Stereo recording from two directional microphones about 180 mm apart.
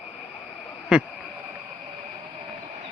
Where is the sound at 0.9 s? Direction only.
5° right (ahead or behind).